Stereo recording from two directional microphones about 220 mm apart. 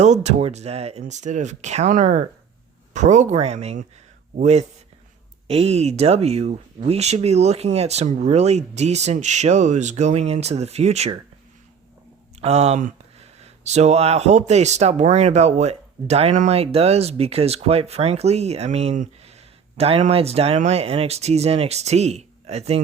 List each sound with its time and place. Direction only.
0.0 s speech: 30° right (ahead or behind)
12.4 s speech: 30° right (ahead or behind)